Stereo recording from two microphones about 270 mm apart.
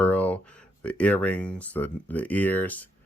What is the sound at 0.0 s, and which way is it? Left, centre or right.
Speech, centre.